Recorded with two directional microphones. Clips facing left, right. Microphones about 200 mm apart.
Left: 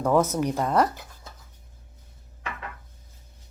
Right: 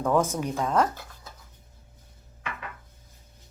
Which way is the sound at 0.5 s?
10° left (ahead or behind).